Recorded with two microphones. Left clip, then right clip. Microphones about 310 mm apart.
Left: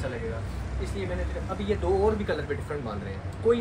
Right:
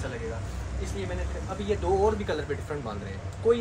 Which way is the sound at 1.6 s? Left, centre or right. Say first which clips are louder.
Even; centre.